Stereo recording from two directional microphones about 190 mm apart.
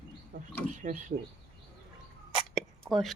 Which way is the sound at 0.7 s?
40° right (ahead or behind).